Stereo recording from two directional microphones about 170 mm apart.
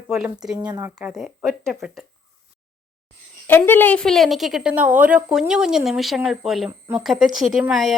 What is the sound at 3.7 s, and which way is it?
Speech, 10° left (ahead or behind).